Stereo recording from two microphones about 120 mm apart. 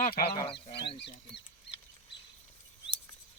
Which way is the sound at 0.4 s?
45° left (ahead or behind).